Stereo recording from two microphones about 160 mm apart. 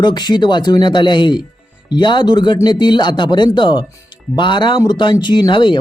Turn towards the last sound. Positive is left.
turn(degrees=30)  # may be behind; listen again after turning